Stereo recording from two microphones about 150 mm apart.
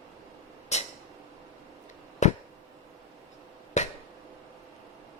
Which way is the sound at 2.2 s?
50° left (ahead or behind).